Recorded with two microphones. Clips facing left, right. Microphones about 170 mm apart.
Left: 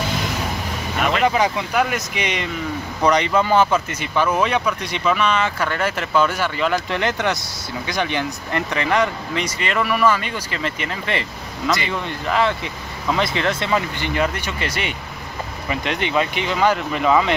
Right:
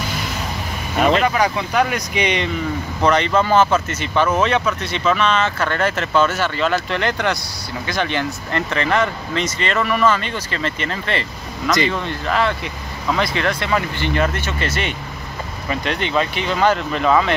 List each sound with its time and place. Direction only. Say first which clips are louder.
0.9 s speech: right 6 dB; 35° right (ahead or behind)
1.2 s speech: even; 15° left (ahead or behind)
3.0 s speech: right 1 dB; 15° left (ahead or behind)